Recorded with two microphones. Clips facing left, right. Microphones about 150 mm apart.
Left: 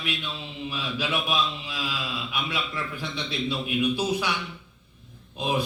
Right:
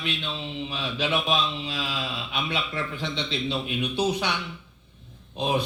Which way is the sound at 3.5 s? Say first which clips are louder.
Left 3 dB; 25° right (ahead or behind).